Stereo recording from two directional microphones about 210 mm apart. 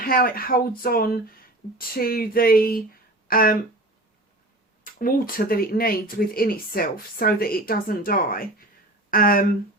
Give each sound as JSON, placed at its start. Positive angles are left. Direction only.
{"t": 0.0, "sound": "speech", "side_deg": 45}
{"t": 4.8, "sound": "speech", "side_deg": 40}